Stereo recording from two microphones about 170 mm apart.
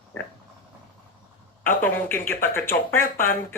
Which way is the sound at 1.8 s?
10° left (ahead or behind).